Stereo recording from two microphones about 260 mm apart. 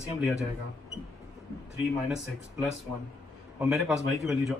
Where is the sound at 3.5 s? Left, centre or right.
Centre.